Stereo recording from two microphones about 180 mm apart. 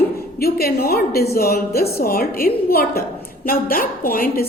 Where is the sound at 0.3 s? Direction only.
60° left (ahead or behind).